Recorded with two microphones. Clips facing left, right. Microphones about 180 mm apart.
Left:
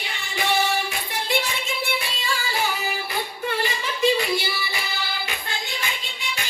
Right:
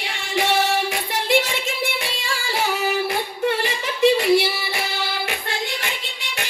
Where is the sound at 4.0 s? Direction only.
75° right (ahead or behind).